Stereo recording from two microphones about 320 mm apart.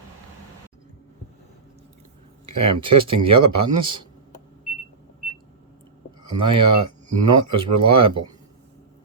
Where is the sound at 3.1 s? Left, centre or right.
Centre.